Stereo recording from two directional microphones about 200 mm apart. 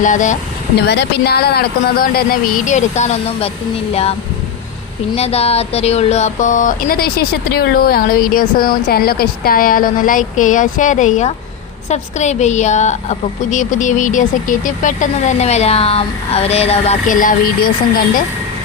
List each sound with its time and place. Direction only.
0.0 s speech: 40° left (ahead or behind)
0.8 s speech: 55° left (ahead or behind); by 3.5 s 35° left (ahead or behind)
5.1 s speech: 30° left (ahead or behind)